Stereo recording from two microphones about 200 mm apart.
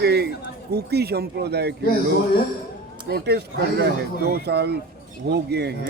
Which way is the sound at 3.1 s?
55° right (ahead or behind).